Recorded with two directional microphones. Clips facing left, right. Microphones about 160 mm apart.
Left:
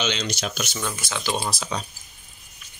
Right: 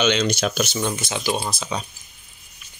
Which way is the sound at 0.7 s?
25° right (ahead or behind).